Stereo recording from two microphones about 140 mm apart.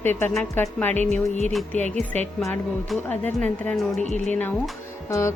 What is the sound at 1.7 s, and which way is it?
Speech, 55° right (ahead or behind).